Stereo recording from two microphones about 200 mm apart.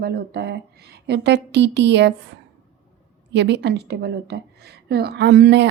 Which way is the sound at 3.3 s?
60° right (ahead or behind).